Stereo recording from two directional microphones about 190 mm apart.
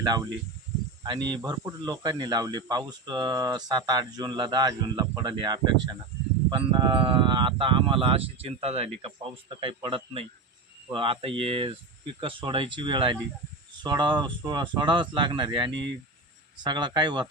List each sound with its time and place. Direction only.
0.0 s speech: 20° right (ahead or behind)